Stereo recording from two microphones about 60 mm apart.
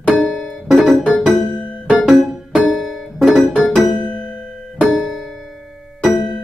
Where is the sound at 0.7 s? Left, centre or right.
Centre.